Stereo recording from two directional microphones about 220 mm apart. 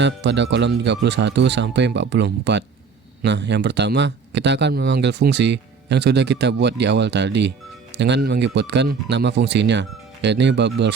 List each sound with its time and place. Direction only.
0.0 s speech: 50° right (ahead or behind)